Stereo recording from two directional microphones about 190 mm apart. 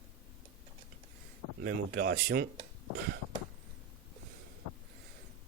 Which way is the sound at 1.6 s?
50° right (ahead or behind).